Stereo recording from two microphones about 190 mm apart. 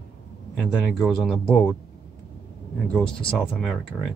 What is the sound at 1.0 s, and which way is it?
Speech, centre (ahead or behind).